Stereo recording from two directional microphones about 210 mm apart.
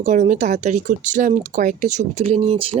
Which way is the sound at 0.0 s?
35° right (ahead or behind).